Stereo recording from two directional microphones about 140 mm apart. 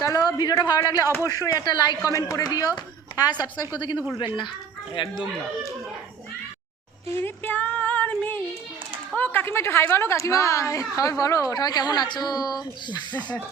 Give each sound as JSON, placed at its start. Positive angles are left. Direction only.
{"t": 0.0, "sound": "a woman's voice", "side_deg": 25}
{"t": 7.2, "sound": "child singing", "side_deg": 15}
{"t": 9.1, "sound": "a woman's voice", "side_deg": 15}